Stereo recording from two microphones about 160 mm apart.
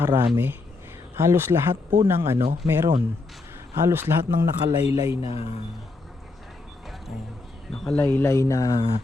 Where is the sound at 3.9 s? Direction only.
15° right (ahead or behind).